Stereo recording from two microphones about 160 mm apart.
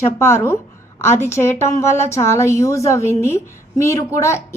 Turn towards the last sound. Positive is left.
turn(degrees=20)  # may be behind; listen again after turning